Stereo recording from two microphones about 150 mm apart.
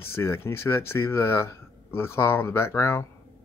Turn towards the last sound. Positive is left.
turn(degrees=15)  # may be behind; listen again after turning